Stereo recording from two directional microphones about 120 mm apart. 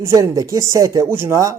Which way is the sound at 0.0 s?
25° right (ahead or behind).